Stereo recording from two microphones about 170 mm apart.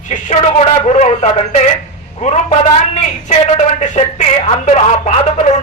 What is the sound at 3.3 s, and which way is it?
Speech, 40° left (ahead or behind).